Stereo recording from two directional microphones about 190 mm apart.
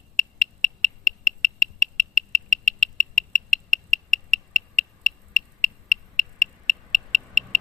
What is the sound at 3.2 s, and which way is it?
Rodents, 35° right (ahead or behind).